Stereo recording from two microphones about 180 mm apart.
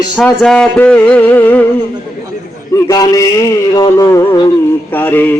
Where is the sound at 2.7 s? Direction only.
20° left (ahead or behind).